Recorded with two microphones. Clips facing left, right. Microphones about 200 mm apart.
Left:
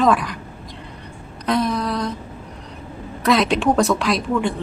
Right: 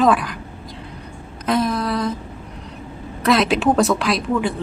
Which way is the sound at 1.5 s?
Centre (ahead or behind).